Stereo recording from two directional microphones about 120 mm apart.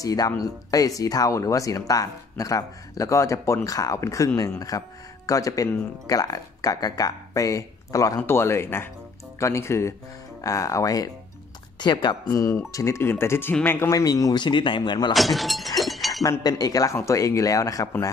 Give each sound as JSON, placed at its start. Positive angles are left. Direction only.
{"t": 0.0, "sound": "speech", "side_deg": 30}
{"t": 12.3, "sound": "speech", "side_deg": 25}
{"t": 15.1, "sound": "a sound", "side_deg": 0}
{"t": 16.2, "sound": "speech", "side_deg": 30}